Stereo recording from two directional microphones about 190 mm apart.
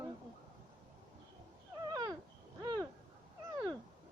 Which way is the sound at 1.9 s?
20° right (ahead or behind).